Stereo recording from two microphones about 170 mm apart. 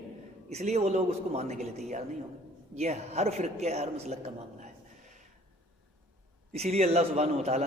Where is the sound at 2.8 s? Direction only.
40° right (ahead or behind).